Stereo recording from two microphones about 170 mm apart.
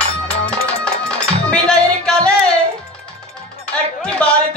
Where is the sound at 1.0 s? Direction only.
5° left (ahead or behind).